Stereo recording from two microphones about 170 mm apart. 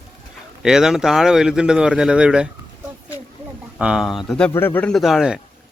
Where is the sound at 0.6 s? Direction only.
5° right (ahead or behind).